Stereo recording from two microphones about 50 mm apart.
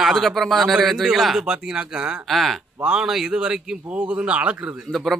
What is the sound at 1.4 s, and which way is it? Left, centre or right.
Speech, centre.